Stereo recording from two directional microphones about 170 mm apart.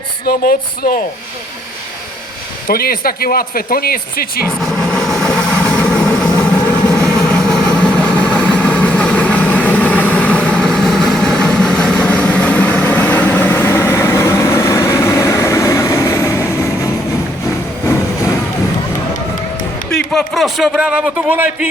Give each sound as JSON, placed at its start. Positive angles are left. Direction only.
{"t": 0.3, "sound": "speech", "side_deg": 60}
{"t": 2.6, "sound": "speech", "side_deg": 60}
{"t": 4.6, "sound": "vehicle", "side_deg": 0}
{"t": 20.1, "sound": "a man's voice", "side_deg": 0}